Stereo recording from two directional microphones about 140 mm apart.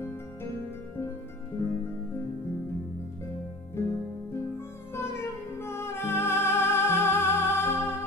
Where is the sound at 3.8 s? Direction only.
20° left (ahead or behind).